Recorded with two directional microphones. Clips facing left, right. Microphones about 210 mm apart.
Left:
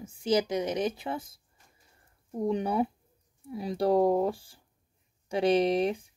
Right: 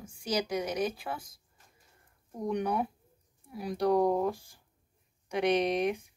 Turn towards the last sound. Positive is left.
turn(degrees=30)  # may be behind; listen again after turning